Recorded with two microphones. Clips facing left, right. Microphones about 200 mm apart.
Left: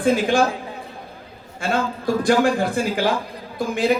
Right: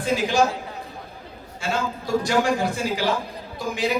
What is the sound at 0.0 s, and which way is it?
Speech, 55° left (ahead or behind).